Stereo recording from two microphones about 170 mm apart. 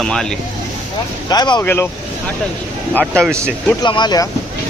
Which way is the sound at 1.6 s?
15° left (ahead or behind).